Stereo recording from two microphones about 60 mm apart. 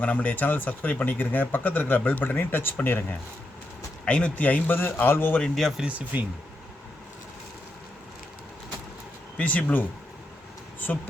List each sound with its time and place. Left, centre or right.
0.0 s speech: left
4.0 s a man's voice: left
5.4 s speech: centre
6.1 s speech: right
9.4 s a man's voice: left
10.8 s speech: left